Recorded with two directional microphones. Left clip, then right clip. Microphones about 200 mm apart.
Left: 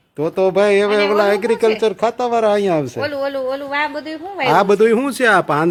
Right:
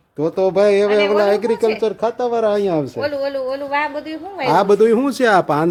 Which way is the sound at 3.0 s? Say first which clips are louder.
Even; 40° left (ahead or behind).